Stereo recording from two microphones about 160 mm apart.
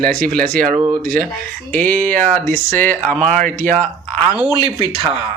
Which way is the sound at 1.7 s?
10° left (ahead or behind).